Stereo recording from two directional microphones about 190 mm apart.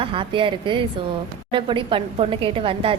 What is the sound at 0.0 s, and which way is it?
A woman's voice, 25° right (ahead or behind).